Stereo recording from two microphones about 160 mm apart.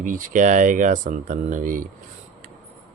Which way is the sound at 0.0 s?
55° right (ahead or behind).